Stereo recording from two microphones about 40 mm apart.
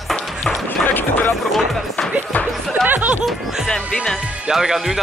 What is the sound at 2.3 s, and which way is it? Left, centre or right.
Music, left.